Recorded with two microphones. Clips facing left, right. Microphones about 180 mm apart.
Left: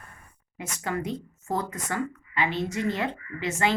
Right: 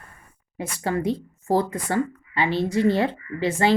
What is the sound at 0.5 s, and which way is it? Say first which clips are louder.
A woman's voice: right 5 dB; 30° right (ahead or behind).